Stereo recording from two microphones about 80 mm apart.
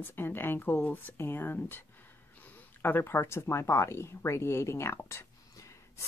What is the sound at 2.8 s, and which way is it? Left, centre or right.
Speech, left.